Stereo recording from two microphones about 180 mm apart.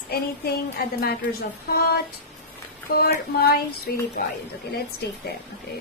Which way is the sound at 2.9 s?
60° left (ahead or behind).